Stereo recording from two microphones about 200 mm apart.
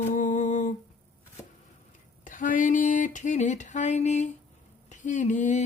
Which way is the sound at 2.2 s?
40° left (ahead or behind).